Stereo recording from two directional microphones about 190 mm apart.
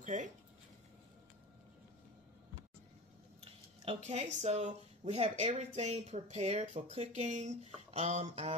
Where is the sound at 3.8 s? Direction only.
35° right (ahead or behind).